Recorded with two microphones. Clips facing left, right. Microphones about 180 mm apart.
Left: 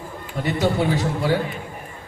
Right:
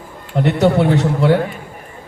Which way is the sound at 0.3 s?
65° right (ahead or behind).